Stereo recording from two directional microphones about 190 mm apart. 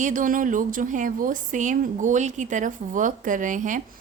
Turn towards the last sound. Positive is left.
turn(degrees=-40)  # may be behind; listen again after turning